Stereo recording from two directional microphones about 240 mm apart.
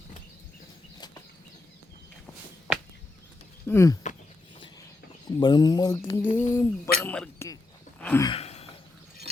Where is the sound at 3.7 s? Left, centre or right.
Centre.